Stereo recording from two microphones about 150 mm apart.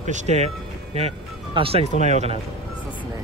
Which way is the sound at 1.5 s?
40° right (ahead or behind).